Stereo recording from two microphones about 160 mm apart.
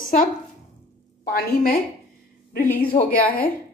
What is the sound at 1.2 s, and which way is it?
Speech, 65° left (ahead or behind).